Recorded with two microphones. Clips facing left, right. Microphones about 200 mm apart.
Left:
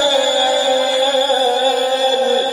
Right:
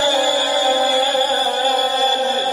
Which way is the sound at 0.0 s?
40° left (ahead or behind).